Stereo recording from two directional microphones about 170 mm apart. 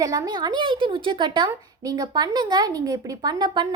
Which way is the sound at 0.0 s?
20° right (ahead or behind).